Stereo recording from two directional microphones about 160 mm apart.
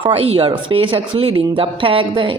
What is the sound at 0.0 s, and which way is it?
A woman's voice, 40° right (ahead or behind).